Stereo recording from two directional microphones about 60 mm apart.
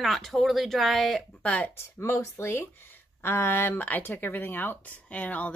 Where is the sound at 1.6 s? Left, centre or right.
Left.